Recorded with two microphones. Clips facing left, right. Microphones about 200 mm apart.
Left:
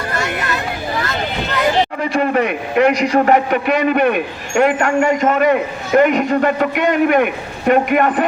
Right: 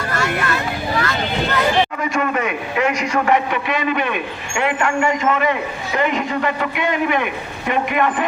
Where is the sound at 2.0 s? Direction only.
35° left (ahead or behind).